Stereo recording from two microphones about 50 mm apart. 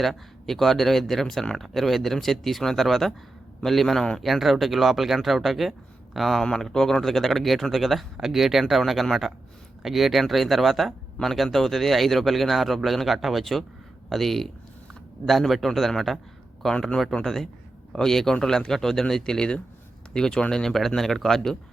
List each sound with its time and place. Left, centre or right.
0.0 s speech: centre
17.2 s speech: centre